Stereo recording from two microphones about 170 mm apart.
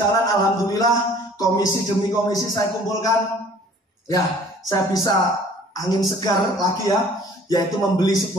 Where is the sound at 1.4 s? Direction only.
20° left (ahead or behind).